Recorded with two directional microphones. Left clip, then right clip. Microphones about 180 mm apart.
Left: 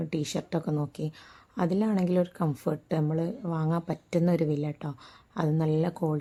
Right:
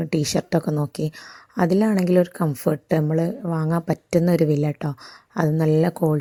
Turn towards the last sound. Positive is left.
turn(degrees=-30)  # may be behind; listen again after turning